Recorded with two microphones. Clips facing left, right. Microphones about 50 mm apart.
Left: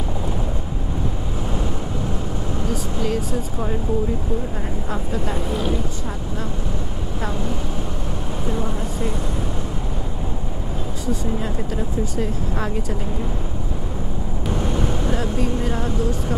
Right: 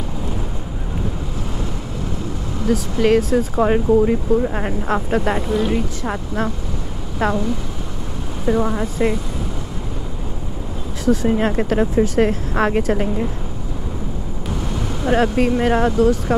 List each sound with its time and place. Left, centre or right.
2.7 s speech: right
8.5 s speech: right
11.1 s speech: right
14.6 s vehicle: centre
15.0 s speech: right